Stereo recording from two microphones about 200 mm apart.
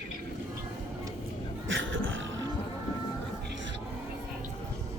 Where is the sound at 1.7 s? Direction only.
70° right (ahead or behind).